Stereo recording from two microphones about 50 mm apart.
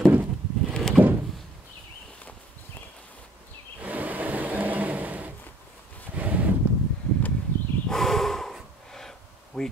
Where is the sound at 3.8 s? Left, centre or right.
Right.